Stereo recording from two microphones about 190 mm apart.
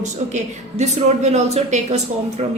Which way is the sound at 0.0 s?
40° right (ahead or behind).